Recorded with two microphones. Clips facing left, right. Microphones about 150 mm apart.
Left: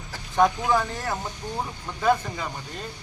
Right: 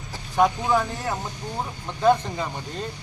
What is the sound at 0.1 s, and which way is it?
Speech, 15° right (ahead or behind).